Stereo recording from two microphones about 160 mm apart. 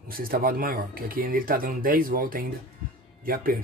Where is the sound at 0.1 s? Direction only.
65° right (ahead or behind).